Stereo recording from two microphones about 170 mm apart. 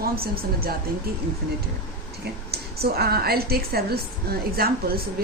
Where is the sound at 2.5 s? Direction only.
65° right (ahead or behind).